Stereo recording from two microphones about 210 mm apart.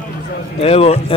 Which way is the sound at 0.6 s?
30° left (ahead or behind).